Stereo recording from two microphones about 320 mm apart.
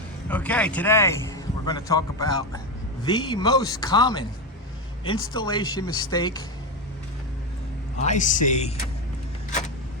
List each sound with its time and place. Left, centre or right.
0.3 s speech: centre
5.3 s speech: centre
7.9 s speech: left
9.5 s a sound: left